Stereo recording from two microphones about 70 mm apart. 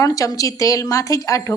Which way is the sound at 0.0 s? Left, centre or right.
Left.